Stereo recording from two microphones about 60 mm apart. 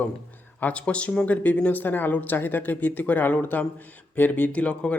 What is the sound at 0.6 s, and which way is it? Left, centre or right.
Speech, centre.